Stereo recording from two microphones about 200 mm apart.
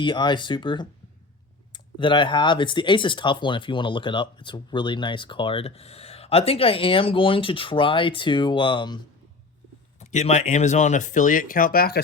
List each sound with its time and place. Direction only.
0.0 s speech: 25° left (ahead or behind)
10.0 s speech: 35° left (ahead or behind)